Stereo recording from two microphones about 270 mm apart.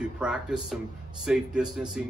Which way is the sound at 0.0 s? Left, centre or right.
Centre.